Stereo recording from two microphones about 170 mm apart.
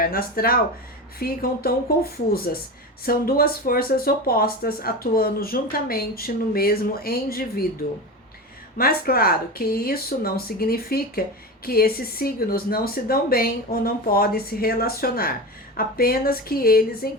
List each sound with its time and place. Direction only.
0.0 s speech: 60° left (ahead or behind)
8.8 s speech: 60° left (ahead or behind)